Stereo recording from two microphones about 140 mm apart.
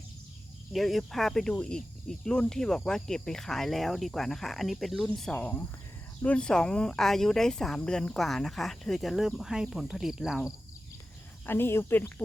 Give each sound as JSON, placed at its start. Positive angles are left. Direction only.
{"t": 0.7, "sound": "speech", "side_deg": 0}
{"t": 11.4, "sound": "speech", "side_deg": 15}